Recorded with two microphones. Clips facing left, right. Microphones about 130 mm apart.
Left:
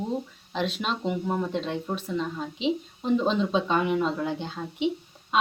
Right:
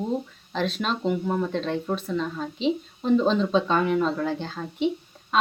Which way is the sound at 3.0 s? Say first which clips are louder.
Right 3 dB; 10° left (ahead or behind).